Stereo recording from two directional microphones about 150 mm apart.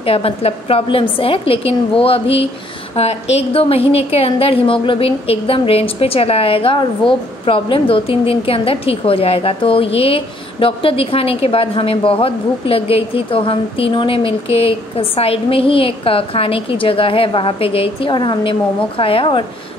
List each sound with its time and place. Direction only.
0.0 s a woman's voice: 40° left (ahead or behind)